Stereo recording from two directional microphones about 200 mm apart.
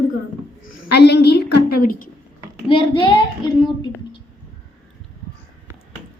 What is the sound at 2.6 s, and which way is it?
A child's voice, 25° left (ahead or behind).